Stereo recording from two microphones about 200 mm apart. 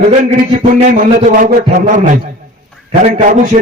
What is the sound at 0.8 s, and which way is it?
A man's voice, 35° right (ahead or behind).